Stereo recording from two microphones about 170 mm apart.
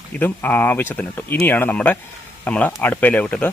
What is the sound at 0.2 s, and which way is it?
Speech, 10° left (ahead or behind).